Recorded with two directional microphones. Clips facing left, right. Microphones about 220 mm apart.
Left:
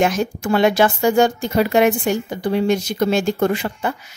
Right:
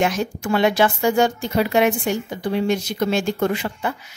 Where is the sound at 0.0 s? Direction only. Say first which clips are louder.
Left 3 dB; 45° left (ahead or behind).